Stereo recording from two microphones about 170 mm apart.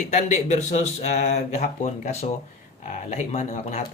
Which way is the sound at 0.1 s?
40° left (ahead or behind).